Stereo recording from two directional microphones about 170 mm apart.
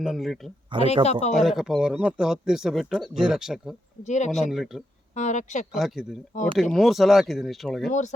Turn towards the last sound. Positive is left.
turn(degrees=0)  # may be behind; listen again after turning